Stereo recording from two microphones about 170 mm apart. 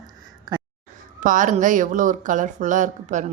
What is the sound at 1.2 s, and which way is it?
Speech, 50° right (ahead or behind).